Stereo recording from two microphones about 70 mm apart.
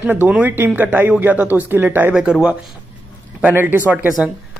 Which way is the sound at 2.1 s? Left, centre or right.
Centre.